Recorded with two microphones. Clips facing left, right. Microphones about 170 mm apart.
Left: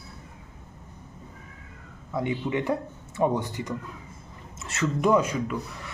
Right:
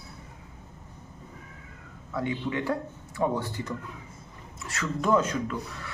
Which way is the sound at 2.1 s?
20° left (ahead or behind).